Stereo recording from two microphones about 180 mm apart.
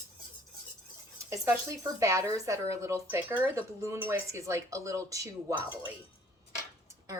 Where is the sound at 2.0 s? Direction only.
15° right (ahead or behind).